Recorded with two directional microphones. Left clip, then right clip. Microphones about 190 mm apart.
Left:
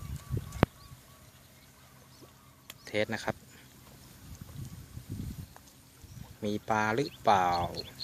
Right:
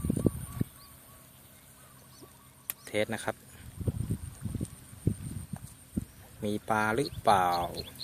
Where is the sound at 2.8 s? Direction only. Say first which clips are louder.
Even; centre (ahead or behind).